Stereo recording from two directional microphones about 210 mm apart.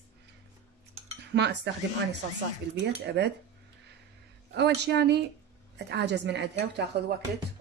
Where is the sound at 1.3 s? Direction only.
55° right (ahead or behind).